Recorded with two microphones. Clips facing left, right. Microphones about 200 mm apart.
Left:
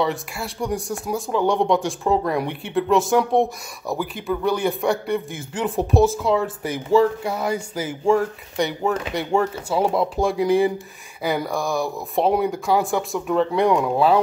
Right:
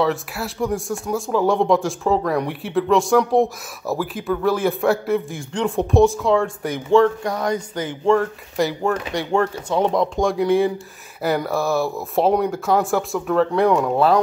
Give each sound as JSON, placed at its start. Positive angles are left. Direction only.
{"t": 0.0, "sound": "speech", "side_deg": 0}